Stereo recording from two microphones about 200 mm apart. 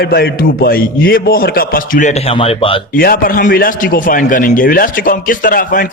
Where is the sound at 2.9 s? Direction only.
45° left (ahead or behind).